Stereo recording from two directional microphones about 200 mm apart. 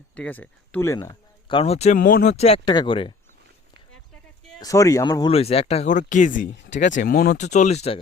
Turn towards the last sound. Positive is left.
turn(degrees=30)  # may be behind; listen again after turning